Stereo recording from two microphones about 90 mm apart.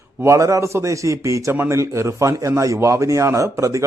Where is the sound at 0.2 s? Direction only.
35° right (ahead or behind).